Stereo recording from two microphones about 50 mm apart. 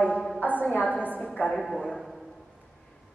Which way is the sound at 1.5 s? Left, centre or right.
Centre.